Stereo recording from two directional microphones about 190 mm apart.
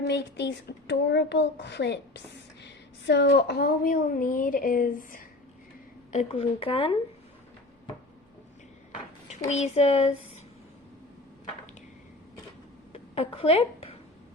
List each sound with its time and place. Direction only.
0.1 s a child's voice: 65° left (ahead or behind); by 5.2 s 45° left (ahead or behind)
6.1 s speech: 35° left (ahead or behind)
9.3 s speech: 35° left (ahead or behind)
12.9 s a sound: 30° left (ahead or behind)